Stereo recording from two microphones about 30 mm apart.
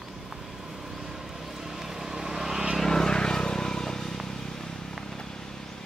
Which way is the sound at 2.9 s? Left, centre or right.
Left.